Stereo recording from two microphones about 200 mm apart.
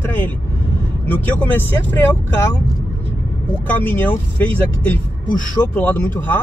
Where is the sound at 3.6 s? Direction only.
10° left (ahead or behind).